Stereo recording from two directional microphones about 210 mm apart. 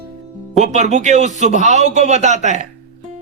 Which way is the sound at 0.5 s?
35° right (ahead or behind).